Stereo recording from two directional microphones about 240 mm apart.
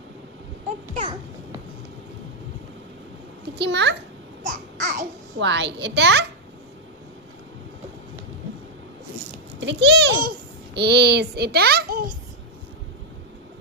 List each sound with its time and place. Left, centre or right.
3.5 s a child's voice: right
4.4 s babbling: right
5.4 s a child's voice: right
9.6 s a child's voice: right